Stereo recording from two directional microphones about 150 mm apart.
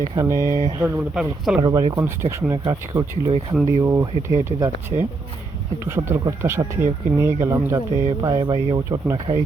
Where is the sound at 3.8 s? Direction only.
20° right (ahead or behind).